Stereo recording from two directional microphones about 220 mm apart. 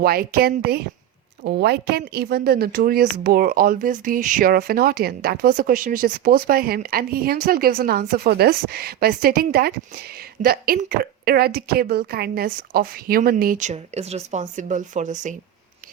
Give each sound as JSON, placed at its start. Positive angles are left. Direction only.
{"t": 0.0, "sound": "a woman's voice", "side_deg": -45}